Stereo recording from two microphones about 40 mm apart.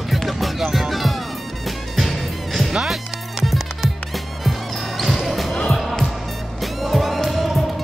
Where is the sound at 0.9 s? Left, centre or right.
Centre.